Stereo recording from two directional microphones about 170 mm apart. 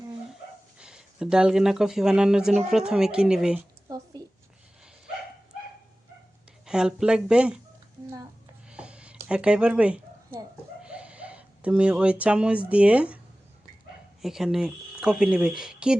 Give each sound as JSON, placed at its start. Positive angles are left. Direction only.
{"t": 0.8, "sound": "speech", "side_deg": -5}
{"t": 3.8, "sound": "a sound", "side_deg": -20}
{"t": 6.7, "sound": "speech", "side_deg": -5}
{"t": 8.7, "sound": "a sound", "side_deg": -5}
{"t": 10.8, "sound": "speech", "side_deg": -5}
{"t": 14.2, "sound": "speech", "side_deg": 0}